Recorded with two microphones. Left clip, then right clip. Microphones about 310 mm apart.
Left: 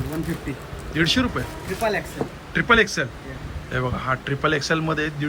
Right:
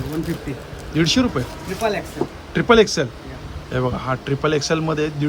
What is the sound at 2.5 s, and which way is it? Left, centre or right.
A man's voice, centre.